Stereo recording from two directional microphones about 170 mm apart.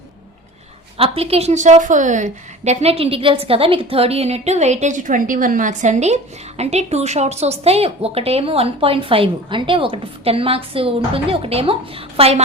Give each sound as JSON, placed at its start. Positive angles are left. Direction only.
{"t": 0.9, "sound": "a woman's voice", "side_deg": -35}